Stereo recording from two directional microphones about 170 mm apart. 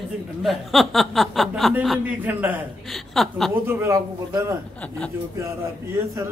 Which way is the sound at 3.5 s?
15° right (ahead or behind).